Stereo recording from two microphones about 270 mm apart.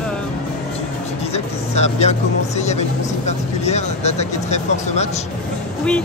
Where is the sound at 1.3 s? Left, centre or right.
Left.